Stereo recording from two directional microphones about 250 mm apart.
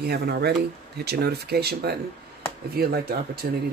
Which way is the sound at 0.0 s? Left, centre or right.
Right.